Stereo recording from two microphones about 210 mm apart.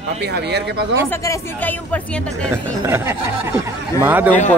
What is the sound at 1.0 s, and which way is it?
Speech, 15° left (ahead or behind).